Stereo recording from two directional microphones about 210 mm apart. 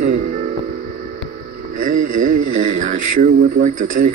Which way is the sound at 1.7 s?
40° right (ahead or behind).